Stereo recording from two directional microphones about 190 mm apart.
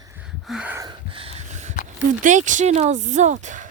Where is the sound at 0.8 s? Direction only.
30° right (ahead or behind).